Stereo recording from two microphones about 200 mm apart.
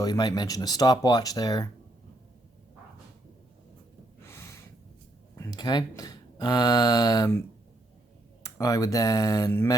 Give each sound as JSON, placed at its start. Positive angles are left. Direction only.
{"t": 0.0, "sound": "speech", "side_deg": 20}
{"t": 4.3, "sound": "snort", "side_deg": 15}
{"t": 5.4, "sound": "speech", "side_deg": 20}
{"t": 8.4, "sound": "speech", "side_deg": 15}